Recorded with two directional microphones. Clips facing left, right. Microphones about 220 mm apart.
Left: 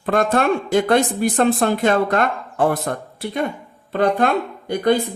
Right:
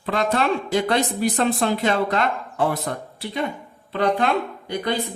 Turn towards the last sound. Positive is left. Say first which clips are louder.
# left 8 dB
turn(degrees=50)  # may be behind; listen again after turning